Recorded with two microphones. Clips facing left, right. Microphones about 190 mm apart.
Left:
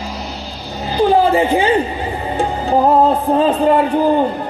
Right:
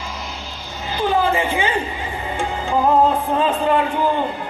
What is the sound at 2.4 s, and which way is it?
Music, 40° left (ahead or behind).